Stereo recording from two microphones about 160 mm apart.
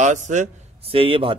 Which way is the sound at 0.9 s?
35° right (ahead or behind).